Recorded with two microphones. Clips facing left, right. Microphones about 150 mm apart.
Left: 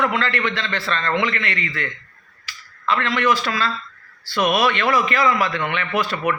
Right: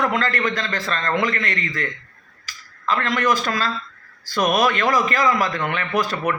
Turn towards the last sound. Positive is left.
turn(degrees=-40)  # may be behind; listen again after turning